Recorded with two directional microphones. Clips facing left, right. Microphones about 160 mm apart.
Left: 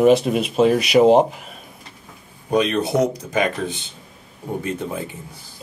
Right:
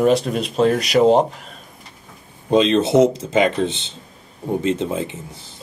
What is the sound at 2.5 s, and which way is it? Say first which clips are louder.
Speech: right 4 dB; 25° right (ahead or behind).